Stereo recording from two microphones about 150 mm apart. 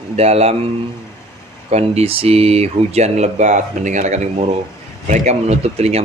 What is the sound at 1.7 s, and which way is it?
A man's voice, 45° right (ahead or behind).